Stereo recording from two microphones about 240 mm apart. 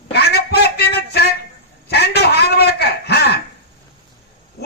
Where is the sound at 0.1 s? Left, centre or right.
Left.